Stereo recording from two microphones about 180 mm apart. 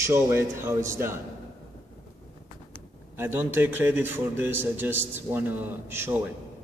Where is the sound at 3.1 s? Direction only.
10° right (ahead or behind).